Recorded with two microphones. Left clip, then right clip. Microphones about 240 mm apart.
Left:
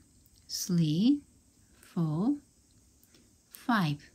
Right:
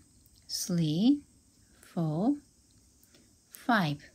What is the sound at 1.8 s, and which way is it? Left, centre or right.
Speech, centre.